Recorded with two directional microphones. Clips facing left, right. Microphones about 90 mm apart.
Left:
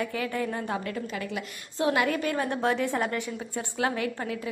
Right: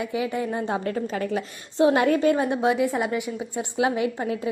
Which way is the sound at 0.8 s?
40° right (ahead or behind).